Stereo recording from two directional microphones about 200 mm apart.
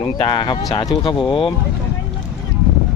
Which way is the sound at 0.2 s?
25° left (ahead or behind).